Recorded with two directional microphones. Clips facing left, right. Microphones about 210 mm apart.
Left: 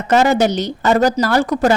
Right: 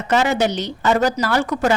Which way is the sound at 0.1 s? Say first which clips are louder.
Left 4 dB; 40° left (ahead or behind).